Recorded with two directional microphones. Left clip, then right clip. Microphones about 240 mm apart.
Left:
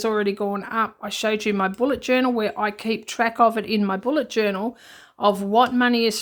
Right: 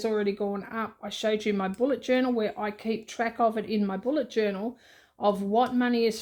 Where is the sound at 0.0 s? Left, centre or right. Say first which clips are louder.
Left 5 dB; centre.